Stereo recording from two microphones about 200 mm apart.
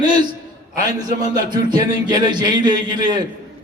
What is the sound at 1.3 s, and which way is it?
A man's voice, 20° right (ahead or behind).